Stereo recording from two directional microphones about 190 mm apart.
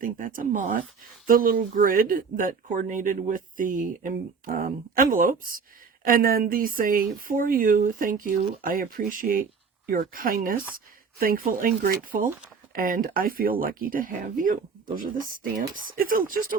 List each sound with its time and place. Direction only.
0.0 s speech: 45° right (ahead or behind)